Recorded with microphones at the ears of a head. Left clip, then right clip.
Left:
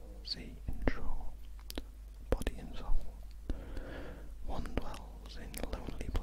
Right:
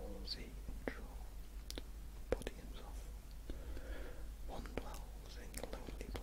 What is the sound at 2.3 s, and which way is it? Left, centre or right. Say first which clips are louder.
Whispering: left 6 dB; left.